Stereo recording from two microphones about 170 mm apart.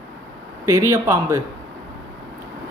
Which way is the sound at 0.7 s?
15° right (ahead or behind).